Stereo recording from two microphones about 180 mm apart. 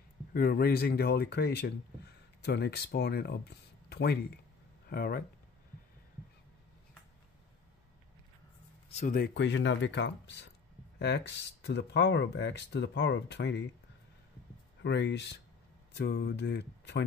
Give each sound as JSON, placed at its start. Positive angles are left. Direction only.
{"t": 0.3, "sound": "speech", "side_deg": 55}
{"t": 8.8, "sound": "a sound", "side_deg": 35}
{"t": 9.1, "sound": "speech", "side_deg": 70}
{"t": 14.8, "sound": "speech", "side_deg": 70}